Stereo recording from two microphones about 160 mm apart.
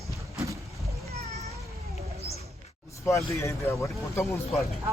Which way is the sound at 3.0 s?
15° left (ahead or behind).